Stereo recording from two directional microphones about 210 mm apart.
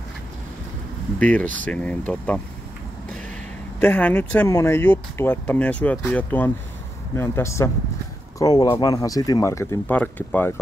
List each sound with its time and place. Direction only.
1.2 s speech: 5° left (ahead or behind)
3.8 s speech: 10° left (ahead or behind)